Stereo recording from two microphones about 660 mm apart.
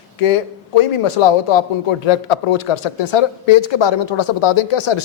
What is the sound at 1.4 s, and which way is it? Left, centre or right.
A woman's voice, left.